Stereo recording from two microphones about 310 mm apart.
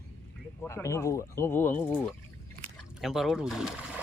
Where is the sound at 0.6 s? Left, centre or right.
Centre.